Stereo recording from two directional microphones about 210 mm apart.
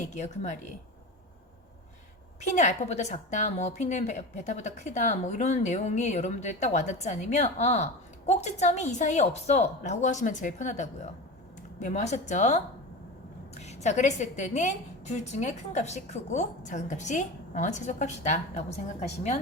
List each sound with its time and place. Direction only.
0.1 s a woman's voice: 35° left (ahead or behind)
2.6 s a woman's voice: 35° left (ahead or behind)